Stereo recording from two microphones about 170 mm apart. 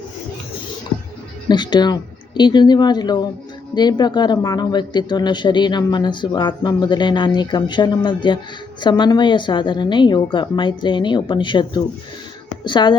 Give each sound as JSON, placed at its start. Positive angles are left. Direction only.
{"t": 1.5, "sound": "speech", "side_deg": 25}